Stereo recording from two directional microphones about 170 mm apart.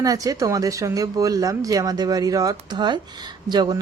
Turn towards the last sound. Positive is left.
turn(degrees=-25)  # may be behind; listen again after turning